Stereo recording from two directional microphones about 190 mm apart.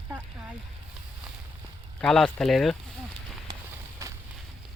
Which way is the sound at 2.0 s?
5° left (ahead or behind).